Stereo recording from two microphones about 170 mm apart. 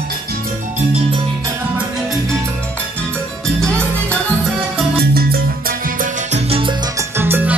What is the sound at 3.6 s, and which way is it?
Salsa music, 5° left (ahead or behind).